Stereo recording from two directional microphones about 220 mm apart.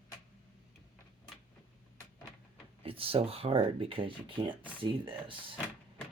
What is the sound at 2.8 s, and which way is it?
Speech, 25° right (ahead or behind).